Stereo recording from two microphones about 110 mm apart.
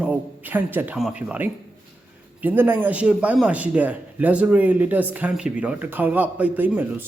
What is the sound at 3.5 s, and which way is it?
Speech, 15° right (ahead or behind).